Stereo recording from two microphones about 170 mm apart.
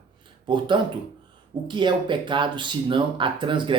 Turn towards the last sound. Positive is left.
turn(degrees=-30)  # may be behind; listen again after turning